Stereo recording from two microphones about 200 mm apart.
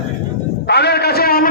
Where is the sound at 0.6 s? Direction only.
55° left (ahead or behind).